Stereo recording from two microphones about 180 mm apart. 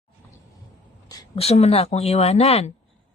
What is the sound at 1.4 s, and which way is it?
Speech, 35° left (ahead or behind).